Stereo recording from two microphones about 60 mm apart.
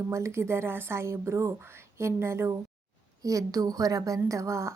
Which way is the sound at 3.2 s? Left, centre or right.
Right.